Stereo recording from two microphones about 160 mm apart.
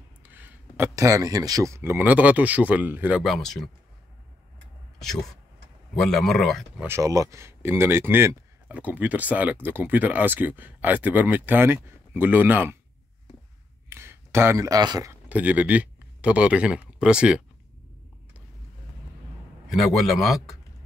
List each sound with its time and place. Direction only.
0.2 s speech: 10° right (ahead or behind)
3.2 s speech: centre (ahead or behind)
6.0 s speech: centre (ahead or behind)
6.8 s speech: 15° right (ahead or behind)
13.8 s a sound: 15° right (ahead or behind)
15.2 s speech: 10° right (ahead or behind)
19.7 s speech: centre (ahead or behind)